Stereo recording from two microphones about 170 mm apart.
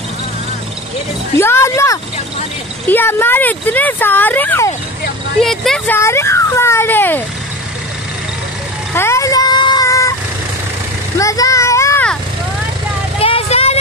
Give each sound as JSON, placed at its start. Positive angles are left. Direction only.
{"t": 1.4, "sound": "speech", "side_deg": 15}
{"t": 5.4, "sound": "speech", "side_deg": 0}
{"t": 5.9, "sound": "speech", "side_deg": 15}
{"t": 8.9, "sound": "vehicle", "side_deg": 15}
{"t": 11.1, "sound": "a sound", "side_deg": 20}
{"t": 13.2, "sound": "vehicle", "side_deg": 35}